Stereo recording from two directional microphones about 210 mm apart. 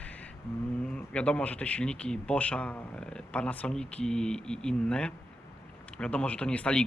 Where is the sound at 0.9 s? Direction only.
5° left (ahead or behind).